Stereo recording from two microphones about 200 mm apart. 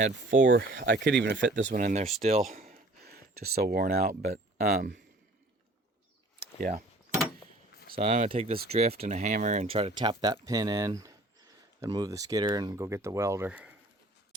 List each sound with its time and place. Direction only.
0.0 s speech: 60° right (ahead or behind)
1.7 s speech: 35° right (ahead or behind)
2.6 s a sound: 50° right (ahead or behind)
4.6 s speech: 50° right (ahead or behind)
6.6 s speech: 45° right (ahead or behind)
7.9 s speech: 30° right (ahead or behind); by 13.7 s 5° right (ahead or behind)